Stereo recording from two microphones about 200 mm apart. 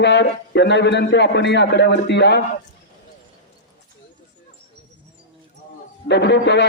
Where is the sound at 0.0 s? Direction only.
60° left (ahead or behind).